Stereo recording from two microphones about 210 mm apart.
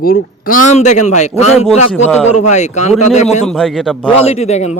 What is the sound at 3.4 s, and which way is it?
Speech, centre (ahead or behind).